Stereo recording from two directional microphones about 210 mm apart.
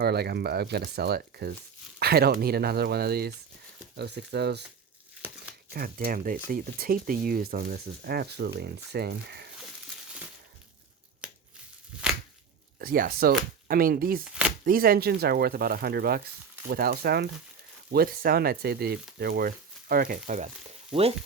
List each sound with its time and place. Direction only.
0.0 s speech: 50° right (ahead or behind)
5.7 s speech: 45° right (ahead or behind)
11.2 s a sound: 5° right (ahead or behind)
12.8 s speech: 45° right (ahead or behind); by 21.1 s 30° right (ahead or behind)